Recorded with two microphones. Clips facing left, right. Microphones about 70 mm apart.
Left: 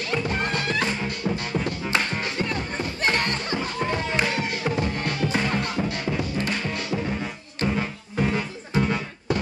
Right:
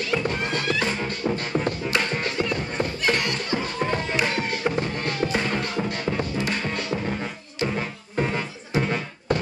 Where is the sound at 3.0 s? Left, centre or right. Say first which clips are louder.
Left 2 dB; left.